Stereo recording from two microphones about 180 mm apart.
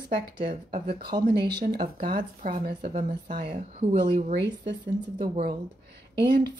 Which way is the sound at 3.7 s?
40° right (ahead or behind).